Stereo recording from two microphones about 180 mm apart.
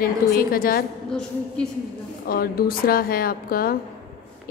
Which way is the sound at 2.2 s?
55° left (ahead or behind).